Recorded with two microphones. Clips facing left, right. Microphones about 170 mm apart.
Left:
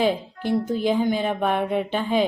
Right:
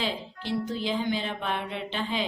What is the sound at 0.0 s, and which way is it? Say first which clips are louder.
A woman's voice: left 10 dB; 50° left (ahead or behind).